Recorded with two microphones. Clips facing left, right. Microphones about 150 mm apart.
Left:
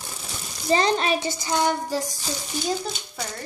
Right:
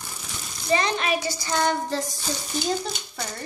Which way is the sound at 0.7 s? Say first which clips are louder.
Left 2 dB; 30° left (ahead or behind).